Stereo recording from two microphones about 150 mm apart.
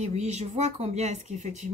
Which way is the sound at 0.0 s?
50° right (ahead or behind).